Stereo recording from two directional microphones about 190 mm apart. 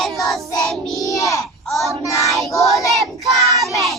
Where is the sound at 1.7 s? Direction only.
Centre (ahead or behind).